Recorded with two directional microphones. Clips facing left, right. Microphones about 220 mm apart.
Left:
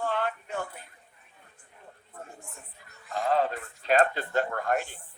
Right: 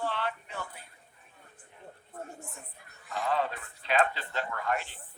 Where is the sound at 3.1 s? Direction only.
40° left (ahead or behind).